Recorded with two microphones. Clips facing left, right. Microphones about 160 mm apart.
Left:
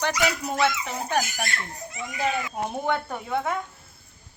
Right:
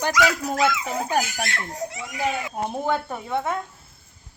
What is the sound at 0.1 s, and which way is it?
Speech, 90° right.